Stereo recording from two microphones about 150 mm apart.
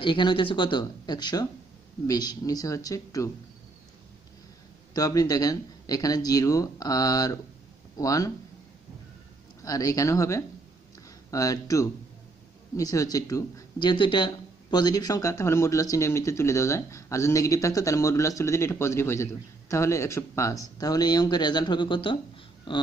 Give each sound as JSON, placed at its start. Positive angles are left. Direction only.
{"t": 0.0, "sound": "speech", "side_deg": 30}
{"t": 4.9, "sound": "speech", "side_deg": 25}
{"t": 9.6, "sound": "speech", "side_deg": 25}